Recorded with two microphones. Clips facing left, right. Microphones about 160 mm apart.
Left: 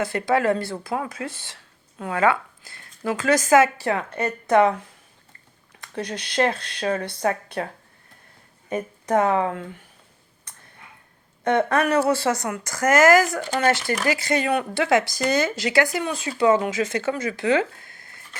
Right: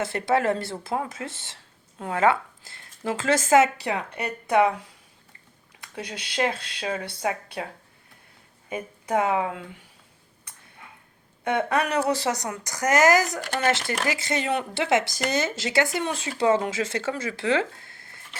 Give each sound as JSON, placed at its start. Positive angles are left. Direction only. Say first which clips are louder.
{"t": 0.0, "sound": "speech", "louder": "left 2 dB", "side_deg": -25}
{"t": 11.4, "sound": "speech", "louder": "left 4 dB", "side_deg": -10}